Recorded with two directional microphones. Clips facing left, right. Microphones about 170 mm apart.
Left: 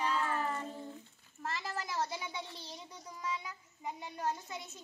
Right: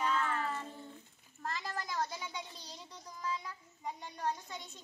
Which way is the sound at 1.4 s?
5° left (ahead or behind).